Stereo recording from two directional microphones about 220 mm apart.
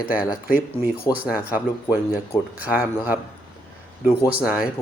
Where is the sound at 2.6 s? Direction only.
5° right (ahead or behind).